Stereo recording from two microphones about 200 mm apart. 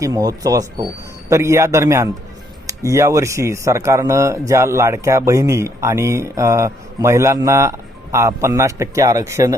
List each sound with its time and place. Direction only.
0.0 s speech: 15° right (ahead or behind)